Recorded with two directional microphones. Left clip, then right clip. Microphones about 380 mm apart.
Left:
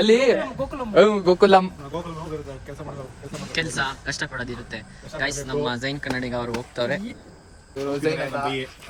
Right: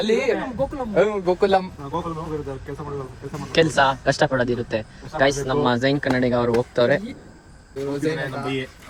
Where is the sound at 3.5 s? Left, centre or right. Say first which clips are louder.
Right 8 dB; centre.